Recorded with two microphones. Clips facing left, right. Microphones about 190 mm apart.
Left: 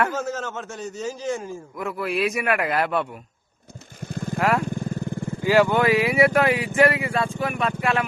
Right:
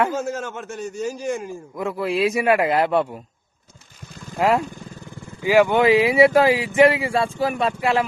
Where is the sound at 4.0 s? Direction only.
55° left (ahead or behind).